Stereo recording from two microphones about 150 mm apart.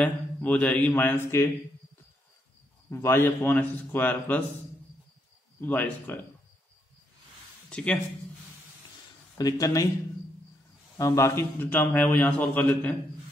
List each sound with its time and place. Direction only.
0.0 s a man's voice: 10° left (ahead or behind)
2.9 s a man's voice: 15° left (ahead or behind)
5.6 s a man's voice: 10° left (ahead or behind)
7.7 s speech: 5° left (ahead or behind)
9.4 s speech: 25° left (ahead or behind)
11.0 s a man's voice: 20° left (ahead or behind)